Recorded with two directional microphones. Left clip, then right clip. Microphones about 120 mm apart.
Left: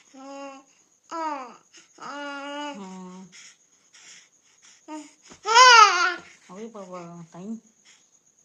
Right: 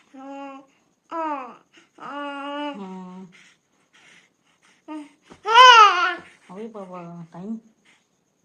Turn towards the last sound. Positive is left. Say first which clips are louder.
# right 3 dB
turn(degrees=0)  # may be behind; listen again after turning